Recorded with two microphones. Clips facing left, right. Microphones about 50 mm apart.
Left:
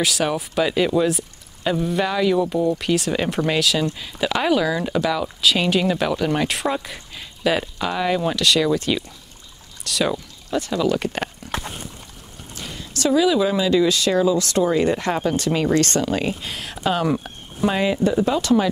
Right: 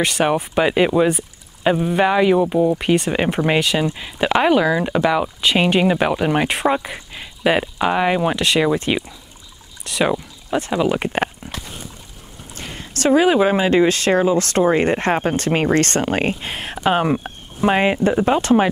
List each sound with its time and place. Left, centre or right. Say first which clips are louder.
0.0 s speech: right 4 dB; right
12.5 s speech: right 2 dB; right